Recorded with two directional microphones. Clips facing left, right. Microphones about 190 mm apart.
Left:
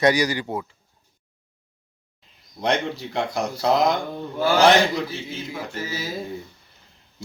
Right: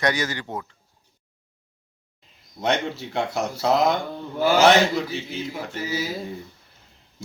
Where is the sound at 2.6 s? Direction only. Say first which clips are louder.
Left 1 dB; centre (ahead or behind).